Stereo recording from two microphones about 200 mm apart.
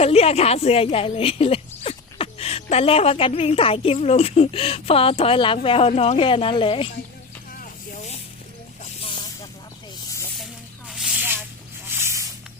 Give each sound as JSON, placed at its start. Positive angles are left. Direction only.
{"t": 0.0, "sound": "a woman's voice", "side_deg": 30}
{"t": 7.6, "sound": "snake", "side_deg": 35}
{"t": 10.4, "sound": "snake", "side_deg": 0}
{"t": 11.9, "sound": "a sound", "side_deg": -10}